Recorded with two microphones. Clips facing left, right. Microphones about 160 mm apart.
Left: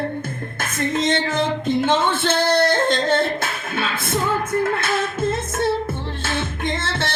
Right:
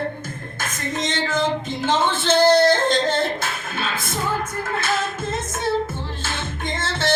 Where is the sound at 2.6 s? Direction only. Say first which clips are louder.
Right 1 dB; 55° left (ahead or behind).